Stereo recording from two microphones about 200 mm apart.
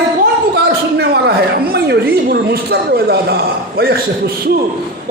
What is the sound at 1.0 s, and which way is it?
A woman's voice, 55° right (ahead or behind).